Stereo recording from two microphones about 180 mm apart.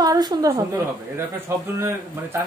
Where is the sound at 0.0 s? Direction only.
20° right (ahead or behind).